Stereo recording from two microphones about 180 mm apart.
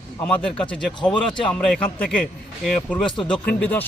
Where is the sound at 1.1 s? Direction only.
25° left (ahead or behind).